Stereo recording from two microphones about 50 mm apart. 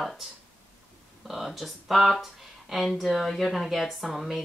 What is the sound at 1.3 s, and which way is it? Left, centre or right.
Speech, centre.